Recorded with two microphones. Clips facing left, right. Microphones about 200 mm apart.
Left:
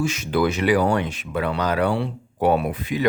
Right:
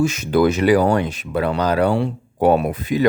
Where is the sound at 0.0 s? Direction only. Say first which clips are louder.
Right 5 dB; 45° right (ahead or behind).